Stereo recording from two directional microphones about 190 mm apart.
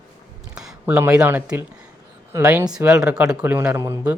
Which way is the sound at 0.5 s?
5° right (ahead or behind).